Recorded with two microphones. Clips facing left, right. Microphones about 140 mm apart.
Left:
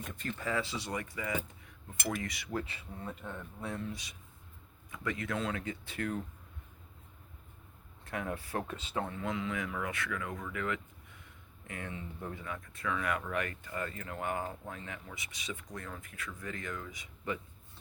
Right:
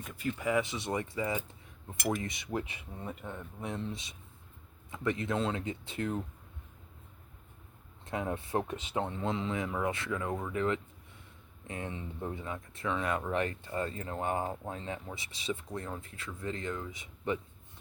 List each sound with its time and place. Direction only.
0.0 s speech: 5° right (ahead or behind); by 6.2 s 20° right (ahead or behind)
8.0 s speech: 25° right (ahead or behind)